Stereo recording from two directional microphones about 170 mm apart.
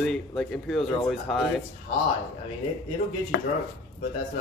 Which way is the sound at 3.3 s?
75° left (ahead or behind).